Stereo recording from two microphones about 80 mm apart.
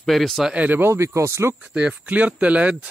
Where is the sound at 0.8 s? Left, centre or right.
Right.